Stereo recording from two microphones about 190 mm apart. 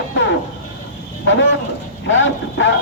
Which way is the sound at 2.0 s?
75° left (ahead or behind).